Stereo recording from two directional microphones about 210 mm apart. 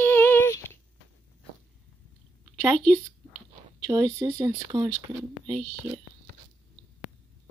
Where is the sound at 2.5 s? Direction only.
5° left (ahead or behind).